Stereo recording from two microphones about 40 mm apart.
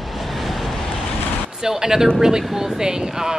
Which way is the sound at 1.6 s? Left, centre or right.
Centre.